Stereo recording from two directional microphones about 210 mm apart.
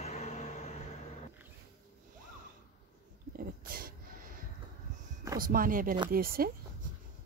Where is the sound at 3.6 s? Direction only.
45° right (ahead or behind).